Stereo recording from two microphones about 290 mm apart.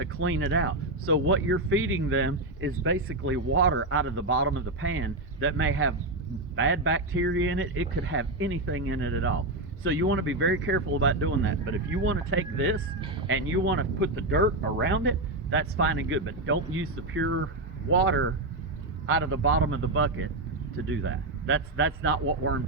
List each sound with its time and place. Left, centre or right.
0.0 s speech: right